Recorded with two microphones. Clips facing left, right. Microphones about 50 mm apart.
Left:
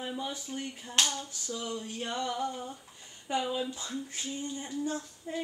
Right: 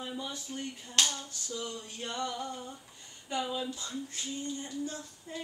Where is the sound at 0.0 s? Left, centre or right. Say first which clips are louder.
Left 3 dB; centre.